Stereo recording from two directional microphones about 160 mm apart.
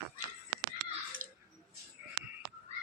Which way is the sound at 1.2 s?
55° right (ahead or behind).